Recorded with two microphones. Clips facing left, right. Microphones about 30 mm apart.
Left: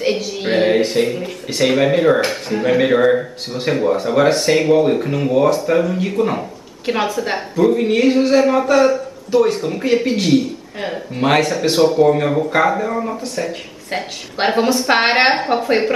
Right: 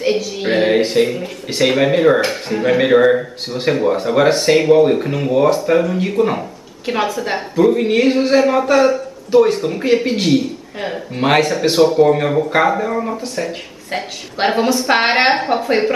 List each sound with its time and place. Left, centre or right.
0.2 s speech: centre